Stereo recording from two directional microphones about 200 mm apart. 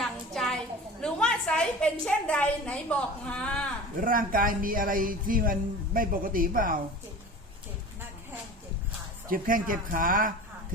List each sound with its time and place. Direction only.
0.0 s a sound: centre (ahead or behind)
1.0 s a woman's voice: 5° left (ahead or behind)
4.0 s speech: 45° right (ahead or behind)
9.3 s speech: 45° right (ahead or behind)